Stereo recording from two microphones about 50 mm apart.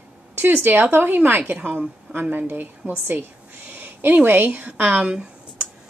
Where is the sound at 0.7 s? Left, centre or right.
Right.